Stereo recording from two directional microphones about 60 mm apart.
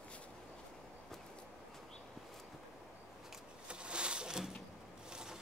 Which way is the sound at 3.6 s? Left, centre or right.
Centre.